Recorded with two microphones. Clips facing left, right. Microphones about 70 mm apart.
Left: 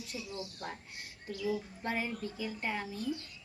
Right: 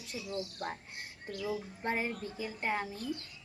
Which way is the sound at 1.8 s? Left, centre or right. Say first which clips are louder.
Right 2 dB; right.